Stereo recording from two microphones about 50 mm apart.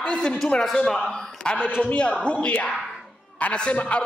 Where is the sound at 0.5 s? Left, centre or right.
Centre.